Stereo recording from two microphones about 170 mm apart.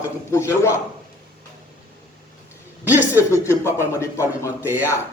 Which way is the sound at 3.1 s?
15° left (ahead or behind).